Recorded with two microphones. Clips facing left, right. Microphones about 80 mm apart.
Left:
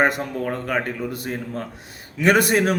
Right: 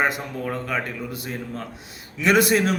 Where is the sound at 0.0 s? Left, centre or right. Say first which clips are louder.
Left 3 dB; left.